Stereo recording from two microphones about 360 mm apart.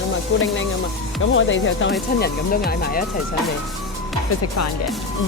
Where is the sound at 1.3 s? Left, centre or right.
Left.